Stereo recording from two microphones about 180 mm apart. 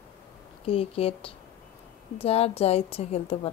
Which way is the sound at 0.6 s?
35° left (ahead or behind).